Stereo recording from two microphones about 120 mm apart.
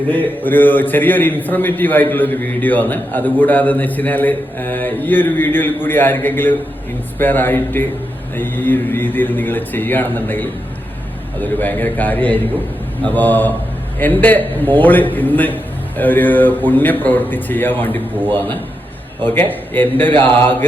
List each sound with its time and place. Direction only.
0.1 s a man's voice: 15° left (ahead or behind)